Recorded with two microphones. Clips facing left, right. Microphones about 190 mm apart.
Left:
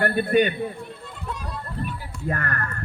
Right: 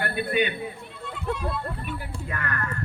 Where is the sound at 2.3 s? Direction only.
45° left (ahead or behind).